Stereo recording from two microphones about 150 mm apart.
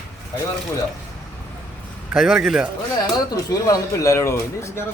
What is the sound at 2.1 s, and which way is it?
Speech, centre (ahead or behind).